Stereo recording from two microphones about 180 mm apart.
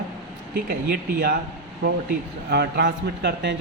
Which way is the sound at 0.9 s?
60° right (ahead or behind).